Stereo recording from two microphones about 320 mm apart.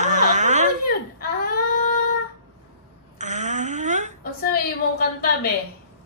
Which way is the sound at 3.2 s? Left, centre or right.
Right.